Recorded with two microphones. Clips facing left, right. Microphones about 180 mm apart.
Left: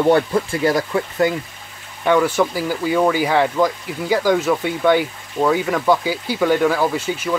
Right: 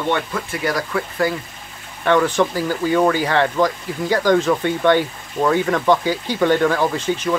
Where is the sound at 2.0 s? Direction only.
10° left (ahead or behind).